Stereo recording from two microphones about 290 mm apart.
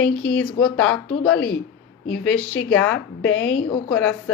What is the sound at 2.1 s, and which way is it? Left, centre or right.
Speech, centre.